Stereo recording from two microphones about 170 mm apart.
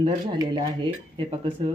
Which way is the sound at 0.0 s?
30° right (ahead or behind).